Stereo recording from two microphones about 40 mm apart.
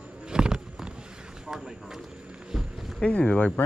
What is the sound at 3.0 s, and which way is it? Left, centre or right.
Speech, left.